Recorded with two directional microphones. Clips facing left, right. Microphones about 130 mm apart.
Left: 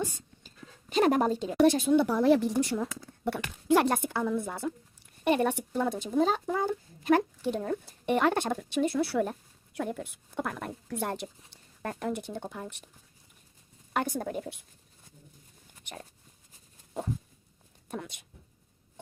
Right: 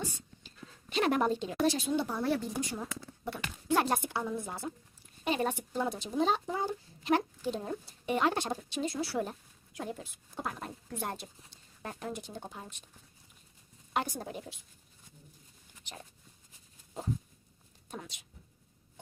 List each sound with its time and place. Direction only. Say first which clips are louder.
0.0 s a sound: left 6 dB; 45° left (ahead or behind)
1.6 s speech: left 8 dB; 55° left (ahead or behind); by 2.5 s 90° left
2.6 s speech: left 8 dB; 70° left (ahead or behind)
3.9 s speech: left 4 dB; 55° left (ahead or behind)
5.7 s speech: left 5 dB; 55° left (ahead or behind)
7.4 s speech: left 5 dB; 60° left (ahead or behind)
13.9 s speech: left 4 dB; 55° left (ahead or behind)
15.9 s speech: left 5 dB; 55° left (ahead or behind)
17.8 s speech: left 6 dB; 55° left (ahead or behind)